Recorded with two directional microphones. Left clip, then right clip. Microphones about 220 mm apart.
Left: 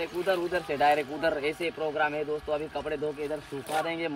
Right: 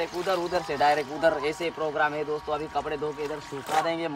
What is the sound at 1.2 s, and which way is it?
Speech, 5° right (ahead or behind).